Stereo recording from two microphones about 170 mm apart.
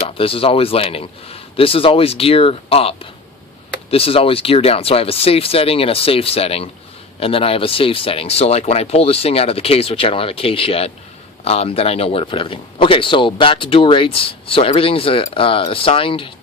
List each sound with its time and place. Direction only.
0.1 s speech: 35° left (ahead or behind)